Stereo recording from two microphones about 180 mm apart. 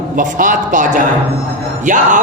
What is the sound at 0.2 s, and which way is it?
A woman's voice, 45° right (ahead or behind).